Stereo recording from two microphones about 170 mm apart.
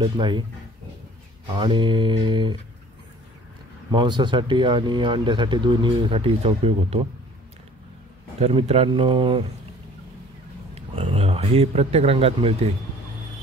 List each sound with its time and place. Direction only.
0.0 s speech: 25° right (ahead or behind)
1.6 s speech: 25° right (ahead or behind)
3.9 s speech: 25° right (ahead or behind)
8.4 s speech: 35° right (ahead or behind)
10.7 s speech: 35° right (ahead or behind)